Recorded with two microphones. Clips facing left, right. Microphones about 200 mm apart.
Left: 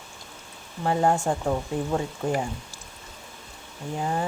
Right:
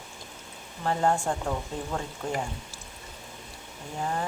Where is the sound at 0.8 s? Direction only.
15° left (ahead or behind).